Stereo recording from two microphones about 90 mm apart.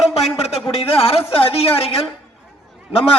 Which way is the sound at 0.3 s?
90° left.